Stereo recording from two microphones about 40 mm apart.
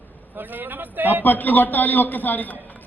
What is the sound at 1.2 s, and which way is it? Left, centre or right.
A man's voice, left.